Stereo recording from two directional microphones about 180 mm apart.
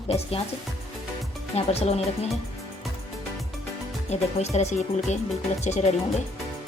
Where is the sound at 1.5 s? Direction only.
35° left (ahead or behind).